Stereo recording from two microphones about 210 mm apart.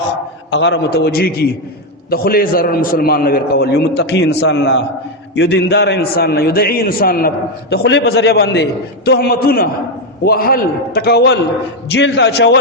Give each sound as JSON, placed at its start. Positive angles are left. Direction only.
{"t": 0.5, "sound": "a man's voice", "side_deg": 60}